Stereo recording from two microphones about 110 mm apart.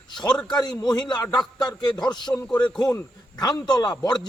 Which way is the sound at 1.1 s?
35° left (ahead or behind).